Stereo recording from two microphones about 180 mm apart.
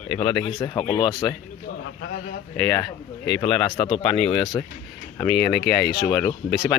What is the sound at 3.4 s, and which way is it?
Speech, 30° left (ahead or behind).